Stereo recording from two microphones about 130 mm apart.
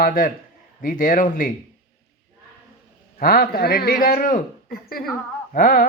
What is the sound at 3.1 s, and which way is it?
A man's voice, 90° left.